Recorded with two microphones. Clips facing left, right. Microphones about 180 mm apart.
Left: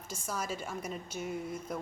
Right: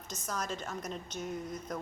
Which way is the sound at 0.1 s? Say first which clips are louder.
Even; 10° left (ahead or behind).